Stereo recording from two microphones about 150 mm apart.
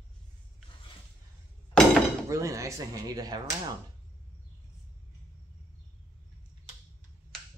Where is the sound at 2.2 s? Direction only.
20° right (ahead or behind).